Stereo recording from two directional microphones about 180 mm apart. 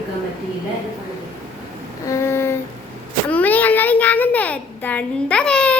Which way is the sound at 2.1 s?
15° left (ahead or behind).